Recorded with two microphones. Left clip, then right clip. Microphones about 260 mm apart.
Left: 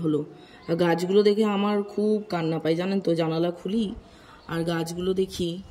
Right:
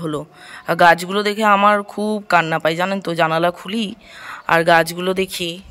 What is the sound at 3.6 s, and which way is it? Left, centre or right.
Speech, right.